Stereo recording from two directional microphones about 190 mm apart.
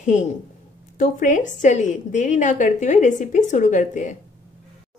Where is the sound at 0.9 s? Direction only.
45° left (ahead or behind).